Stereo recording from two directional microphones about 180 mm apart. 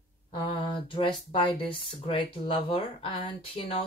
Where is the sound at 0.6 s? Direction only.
25° left (ahead or behind).